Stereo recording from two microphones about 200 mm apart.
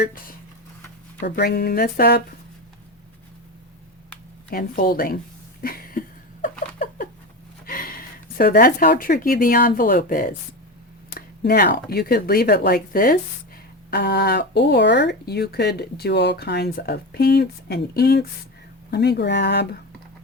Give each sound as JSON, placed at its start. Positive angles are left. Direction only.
{"t": 0.0, "sound": "speech", "side_deg": 45}
{"t": 4.5, "sound": "speech", "side_deg": 45}
{"t": 5.6, "sound": "a sound", "side_deg": 45}
{"t": 7.7, "sound": "speech", "side_deg": 45}